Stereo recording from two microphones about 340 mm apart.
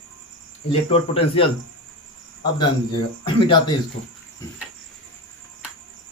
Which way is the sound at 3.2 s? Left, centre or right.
Centre.